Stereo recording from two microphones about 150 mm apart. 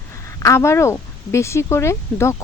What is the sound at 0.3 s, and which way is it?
Speech, 20° left (ahead or behind).